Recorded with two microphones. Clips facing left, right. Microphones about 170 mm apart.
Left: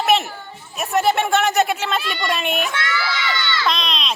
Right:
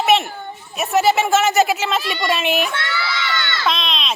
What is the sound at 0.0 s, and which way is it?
Chatter, centre (ahead or behind).